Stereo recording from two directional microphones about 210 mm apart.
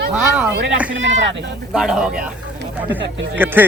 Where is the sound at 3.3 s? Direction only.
10° right (ahead or behind).